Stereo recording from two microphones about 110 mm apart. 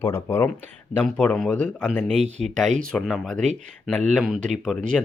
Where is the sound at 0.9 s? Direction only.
10° left (ahead or behind).